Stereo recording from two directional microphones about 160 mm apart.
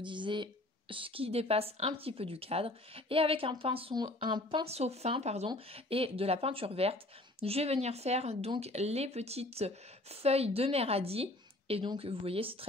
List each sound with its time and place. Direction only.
0.0 s a woman's voice: 30° right (ahead or behind)